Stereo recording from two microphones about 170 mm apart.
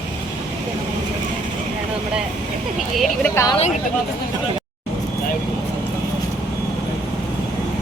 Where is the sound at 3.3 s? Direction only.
20° left (ahead or behind).